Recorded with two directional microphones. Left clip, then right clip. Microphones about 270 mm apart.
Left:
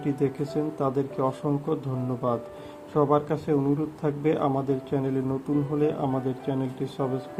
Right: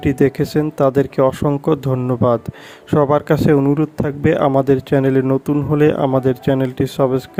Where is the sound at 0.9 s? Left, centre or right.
Right.